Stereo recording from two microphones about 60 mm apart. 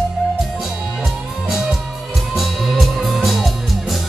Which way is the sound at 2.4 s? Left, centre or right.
Centre.